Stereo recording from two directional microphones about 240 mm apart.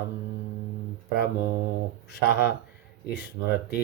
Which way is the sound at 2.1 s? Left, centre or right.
Left.